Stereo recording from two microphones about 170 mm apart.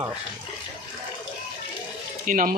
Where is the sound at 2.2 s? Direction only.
55° right (ahead or behind).